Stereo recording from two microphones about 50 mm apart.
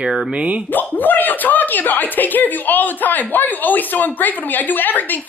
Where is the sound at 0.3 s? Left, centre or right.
Right.